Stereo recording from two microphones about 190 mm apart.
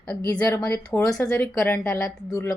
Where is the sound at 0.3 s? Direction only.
15° left (ahead or behind).